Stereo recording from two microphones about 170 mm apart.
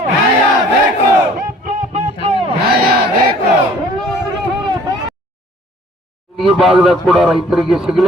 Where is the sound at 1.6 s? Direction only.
45° right (ahead or behind).